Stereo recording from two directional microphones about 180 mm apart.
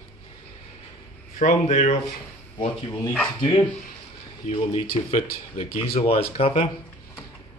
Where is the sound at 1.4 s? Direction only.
40° left (ahead or behind).